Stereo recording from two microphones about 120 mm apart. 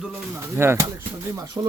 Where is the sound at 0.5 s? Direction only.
20° right (ahead or behind).